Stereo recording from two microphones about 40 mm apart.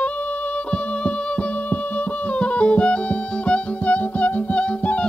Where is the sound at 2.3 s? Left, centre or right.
Left.